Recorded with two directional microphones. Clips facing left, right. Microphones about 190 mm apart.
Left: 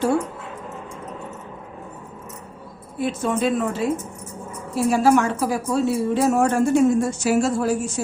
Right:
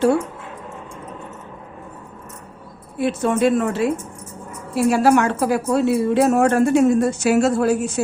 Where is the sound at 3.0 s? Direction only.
65° right (ahead or behind).